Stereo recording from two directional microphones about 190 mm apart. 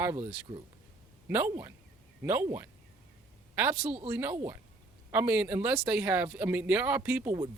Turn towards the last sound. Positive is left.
turn(degrees=-10)  # may be behind; listen again after turning